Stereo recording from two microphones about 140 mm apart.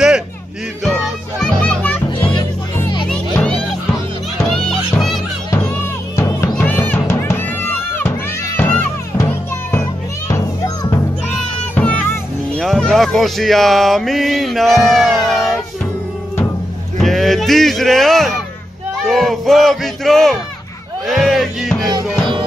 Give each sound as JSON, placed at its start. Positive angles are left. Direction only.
{"t": 1.4, "sound": "children playing", "side_deg": 10}
{"t": 3.1, "sound": "music", "side_deg": 5}
{"t": 6.5, "sound": "music", "side_deg": 10}
{"t": 11.7, "sound": "music", "side_deg": 10}
{"t": 12.6, "sound": "speech", "side_deg": 0}
{"t": 17.0, "sound": "speech", "side_deg": 0}
{"t": 21.1, "sound": "music", "side_deg": 0}